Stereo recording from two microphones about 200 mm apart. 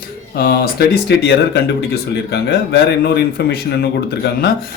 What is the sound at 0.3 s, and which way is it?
Speech, 50° left (ahead or behind).